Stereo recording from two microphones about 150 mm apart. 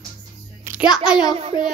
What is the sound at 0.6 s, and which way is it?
Speech, 5° right (ahead or behind).